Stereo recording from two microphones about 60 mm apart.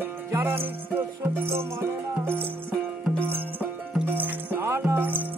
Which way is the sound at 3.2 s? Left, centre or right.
Right.